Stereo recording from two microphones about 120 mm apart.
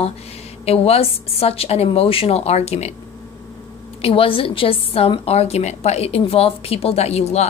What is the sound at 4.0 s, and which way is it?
A woman's voice, 50° left (ahead or behind).